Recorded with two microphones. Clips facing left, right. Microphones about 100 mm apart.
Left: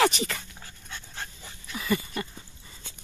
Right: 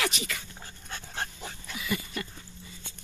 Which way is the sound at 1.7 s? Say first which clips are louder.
Left 5 dB; 40° left (ahead or behind).